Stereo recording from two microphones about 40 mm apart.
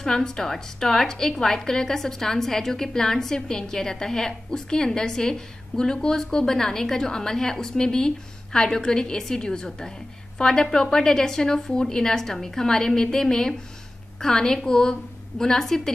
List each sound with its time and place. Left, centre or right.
0.0 s a woman's voice: centre